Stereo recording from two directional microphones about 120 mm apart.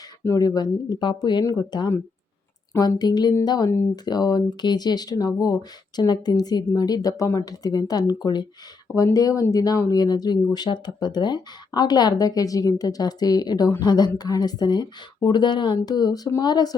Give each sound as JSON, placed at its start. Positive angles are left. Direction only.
{"t": 0.3, "sound": "speech", "side_deg": 30}
{"t": 3.0, "sound": "speech", "side_deg": 35}